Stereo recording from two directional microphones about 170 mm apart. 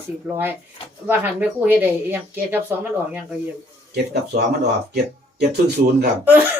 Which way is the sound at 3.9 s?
75° right (ahead or behind).